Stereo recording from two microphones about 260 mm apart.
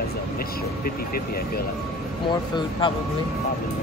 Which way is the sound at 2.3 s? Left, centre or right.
Centre.